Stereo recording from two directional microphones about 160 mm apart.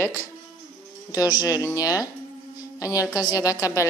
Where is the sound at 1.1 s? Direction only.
20° left (ahead or behind).